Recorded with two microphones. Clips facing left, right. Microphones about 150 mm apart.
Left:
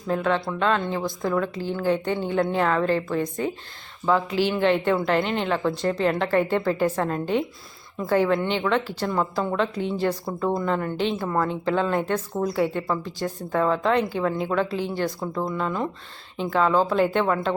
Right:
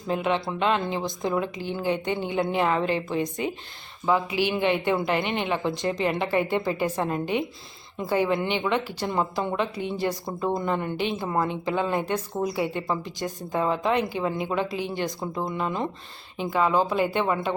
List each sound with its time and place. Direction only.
0.1 s speech: 15° right (ahead or behind)